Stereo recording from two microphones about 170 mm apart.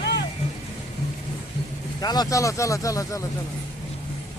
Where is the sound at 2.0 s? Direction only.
25° left (ahead or behind).